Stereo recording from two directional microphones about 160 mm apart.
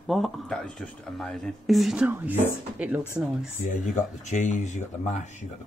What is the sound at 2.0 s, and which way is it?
Speech, 15° right (ahead or behind).